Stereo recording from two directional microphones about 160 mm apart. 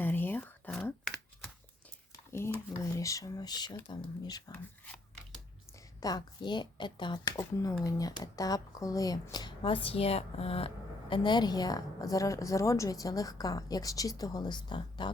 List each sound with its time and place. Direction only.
0.0 s whispering: 10° left (ahead or behind)
2.7 s speech: 20° left (ahead or behind)
6.0 s speech: 25° left (ahead or behind)